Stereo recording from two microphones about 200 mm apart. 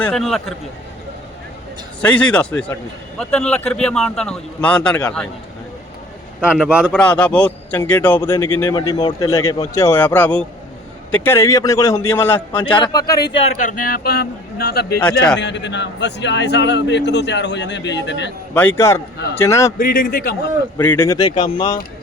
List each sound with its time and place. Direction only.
0.0 s speech: 5° left (ahead or behind)
2.0 s speech: 5° left (ahead or behind)
6.4 s a man's voice: 5° right (ahead or behind)
6.9 s a man's voice: 5° left (ahead or behind)
12.7 s speech: 20° left (ahead or behind)
13.3 s a man's voice: 35° left (ahead or behind); by 14.9 s 50° left (ahead or behind)
15.0 s speech: 5° left (ahead or behind)
15.4 s a man's voice: 60° left (ahead or behind)
18.8 s a man's voice: 15° left (ahead or behind)
19.8 s a man's voice: 45° left (ahead or behind)
20.7 s speech: 10° left (ahead or behind)